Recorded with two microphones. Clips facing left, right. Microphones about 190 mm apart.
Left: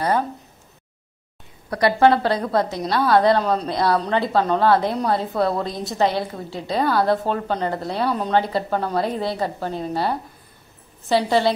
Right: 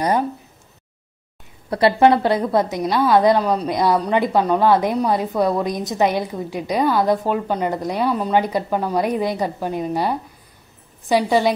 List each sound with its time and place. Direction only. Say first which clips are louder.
1.7 s a woman's voice: right 2 dB; 25° right (ahead or behind)